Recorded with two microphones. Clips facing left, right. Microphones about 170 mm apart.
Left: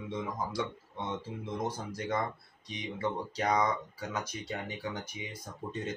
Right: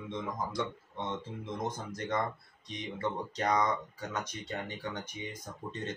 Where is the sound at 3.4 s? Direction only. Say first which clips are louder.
Even; 5° left (ahead or behind).